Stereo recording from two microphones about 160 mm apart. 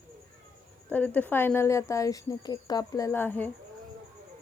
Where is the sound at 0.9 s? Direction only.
10° left (ahead or behind).